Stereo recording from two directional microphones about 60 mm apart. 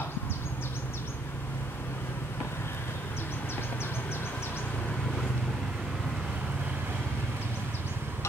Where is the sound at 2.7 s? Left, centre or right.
Left.